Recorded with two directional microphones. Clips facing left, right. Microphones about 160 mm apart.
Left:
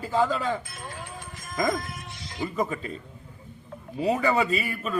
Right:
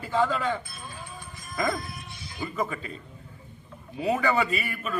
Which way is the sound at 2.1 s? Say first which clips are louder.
Left 3 dB; 90° left.